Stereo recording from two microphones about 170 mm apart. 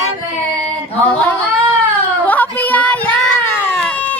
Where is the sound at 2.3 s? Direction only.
10° left (ahead or behind).